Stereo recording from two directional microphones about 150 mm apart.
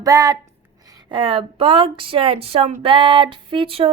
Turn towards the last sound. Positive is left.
turn(degrees=-40)  # may be behind; listen again after turning